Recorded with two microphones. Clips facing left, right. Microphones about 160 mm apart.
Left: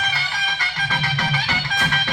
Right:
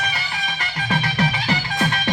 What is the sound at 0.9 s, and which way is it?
Music, 35° right (ahead or behind).